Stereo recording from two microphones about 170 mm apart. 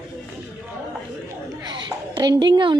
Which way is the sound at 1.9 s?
25° right (ahead or behind).